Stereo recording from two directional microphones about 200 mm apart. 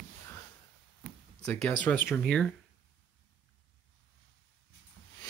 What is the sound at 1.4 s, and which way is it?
Speech, 5° left (ahead or behind).